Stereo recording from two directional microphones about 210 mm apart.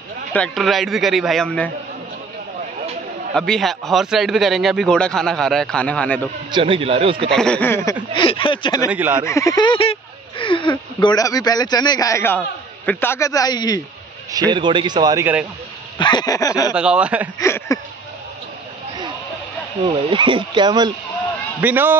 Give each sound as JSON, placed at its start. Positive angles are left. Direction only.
{"t": 0.3, "sound": "a man's voice", "side_deg": 5}
{"t": 3.3, "sound": "a man's voice", "side_deg": 0}
{"t": 6.5, "sound": "a man's voice", "side_deg": -25}
{"t": 7.2, "sound": "a man's voice", "side_deg": 5}
{"t": 8.2, "sound": "speech", "side_deg": 25}
{"t": 8.8, "sound": "a man's voice", "side_deg": -5}
{"t": 9.2, "sound": "a man's voice", "side_deg": 15}
{"t": 14.3, "sound": "a man's voice", "side_deg": -20}
{"t": 16.0, "sound": "a man's voice", "side_deg": 20}
{"t": 16.7, "sound": "a man's voice", "side_deg": -5}
{"t": 17.4, "sound": "a man's voice", "side_deg": 15}
{"t": 19.9, "sound": "a man's voice", "side_deg": -25}
{"t": 21.5, "sound": "a man's voice", "side_deg": -10}